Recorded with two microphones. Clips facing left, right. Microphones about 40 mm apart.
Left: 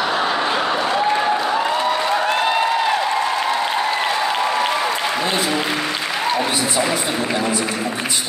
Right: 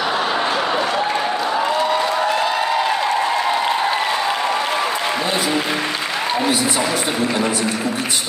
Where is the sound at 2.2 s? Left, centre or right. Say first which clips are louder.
Left 1 dB; left.